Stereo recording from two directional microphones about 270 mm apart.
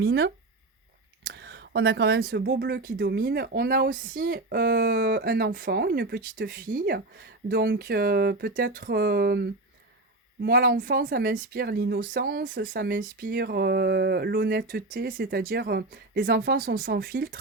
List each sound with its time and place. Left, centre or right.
0.0 s speech: right